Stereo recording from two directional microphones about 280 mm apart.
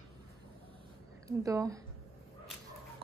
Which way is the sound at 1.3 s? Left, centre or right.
Centre.